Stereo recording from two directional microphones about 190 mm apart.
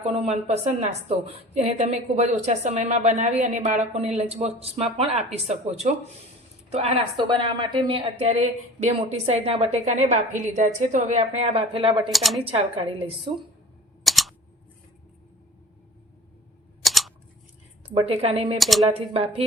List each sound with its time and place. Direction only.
0.0 s a woman's voice: 30° right (ahead or behind)
12.1 s speech: centre (ahead or behind)
12.5 s a woman's voice: 30° right (ahead or behind)
14.0 s a sound: centre (ahead or behind)
16.8 s scissors: centre (ahead or behind)
17.8 s a woman's voice: 30° right (ahead or behind)
18.5 s speech: centre (ahead or behind)
18.9 s a woman's voice: 30° right (ahead or behind)